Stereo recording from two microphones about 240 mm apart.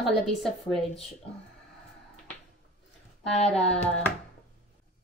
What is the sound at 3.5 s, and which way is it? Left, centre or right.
Hands, left.